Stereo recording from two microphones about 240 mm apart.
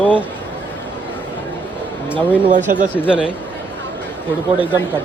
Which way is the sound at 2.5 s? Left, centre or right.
Right.